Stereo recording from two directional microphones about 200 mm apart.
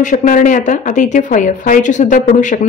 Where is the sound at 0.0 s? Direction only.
40° left (ahead or behind).